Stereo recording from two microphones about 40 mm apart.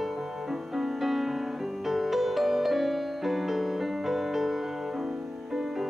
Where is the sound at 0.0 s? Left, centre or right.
Centre.